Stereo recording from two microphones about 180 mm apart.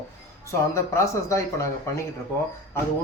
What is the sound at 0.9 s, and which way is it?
Speech, 15° left (ahead or behind).